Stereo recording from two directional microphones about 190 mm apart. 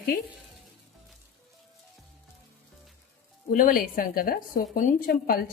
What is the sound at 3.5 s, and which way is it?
A woman's voice, 45° left (ahead or behind).